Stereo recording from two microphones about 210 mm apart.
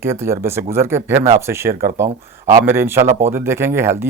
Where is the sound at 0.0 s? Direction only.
10° right (ahead or behind).